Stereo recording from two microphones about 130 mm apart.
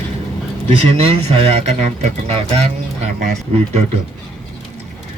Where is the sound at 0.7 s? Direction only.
50° right (ahead or behind).